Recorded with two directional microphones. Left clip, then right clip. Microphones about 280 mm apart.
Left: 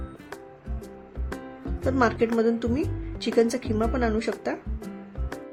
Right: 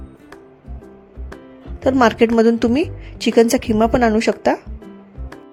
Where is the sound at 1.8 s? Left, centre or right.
Right.